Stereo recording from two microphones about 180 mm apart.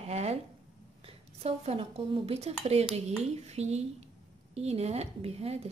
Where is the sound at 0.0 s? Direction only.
35° right (ahead or behind).